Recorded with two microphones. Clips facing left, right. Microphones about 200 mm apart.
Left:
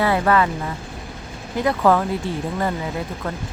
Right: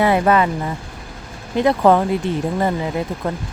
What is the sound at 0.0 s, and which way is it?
Speech, 20° right (ahead or behind).